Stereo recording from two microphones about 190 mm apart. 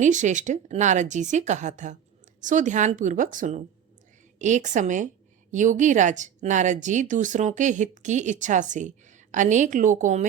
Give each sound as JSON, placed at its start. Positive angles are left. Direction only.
{"t": 0.0, "sound": "speech", "side_deg": -40}